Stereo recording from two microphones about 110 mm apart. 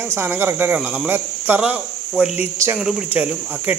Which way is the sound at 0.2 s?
20° right (ahead or behind).